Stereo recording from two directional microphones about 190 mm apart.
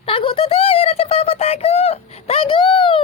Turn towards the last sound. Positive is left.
turn(degrees=25)  # may be behind; listen again after turning